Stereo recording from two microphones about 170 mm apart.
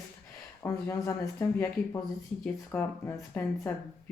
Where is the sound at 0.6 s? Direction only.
20° left (ahead or behind).